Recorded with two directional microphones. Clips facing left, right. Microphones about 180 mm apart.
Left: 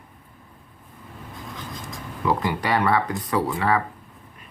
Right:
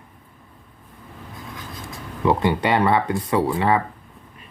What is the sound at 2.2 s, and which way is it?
Speech, 25° right (ahead or behind).